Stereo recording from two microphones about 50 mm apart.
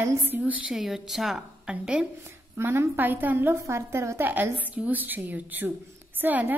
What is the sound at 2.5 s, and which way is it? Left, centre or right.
Speech, right.